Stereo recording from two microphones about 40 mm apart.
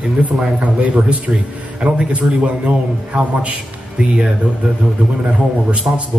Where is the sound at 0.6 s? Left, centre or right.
Right.